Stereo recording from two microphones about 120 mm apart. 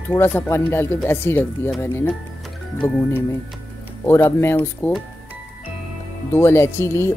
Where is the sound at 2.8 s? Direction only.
25° left (ahead or behind).